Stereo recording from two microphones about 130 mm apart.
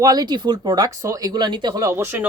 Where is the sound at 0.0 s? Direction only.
30° right (ahead or behind).